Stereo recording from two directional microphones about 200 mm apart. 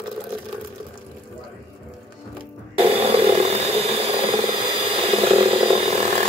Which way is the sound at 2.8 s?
30° right (ahead or behind).